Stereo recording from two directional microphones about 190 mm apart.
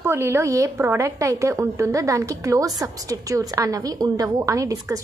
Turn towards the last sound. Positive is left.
turn(degrees=-15)  # may be behind; listen again after turning